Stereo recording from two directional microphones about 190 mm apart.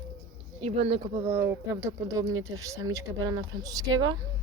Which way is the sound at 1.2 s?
10° right (ahead or behind).